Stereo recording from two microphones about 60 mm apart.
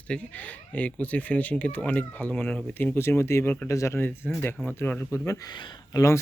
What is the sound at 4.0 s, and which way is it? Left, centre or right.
Speech, left.